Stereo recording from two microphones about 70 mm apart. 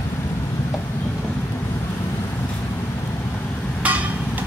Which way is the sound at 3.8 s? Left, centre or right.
Centre.